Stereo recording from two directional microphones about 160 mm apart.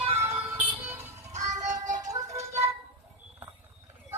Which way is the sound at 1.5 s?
50° right (ahead or behind).